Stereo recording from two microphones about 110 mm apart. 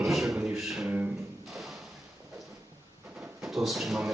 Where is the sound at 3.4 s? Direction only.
5° right (ahead or behind).